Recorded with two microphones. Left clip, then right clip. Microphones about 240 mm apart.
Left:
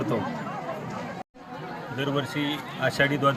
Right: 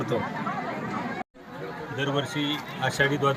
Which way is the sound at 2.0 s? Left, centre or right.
Centre.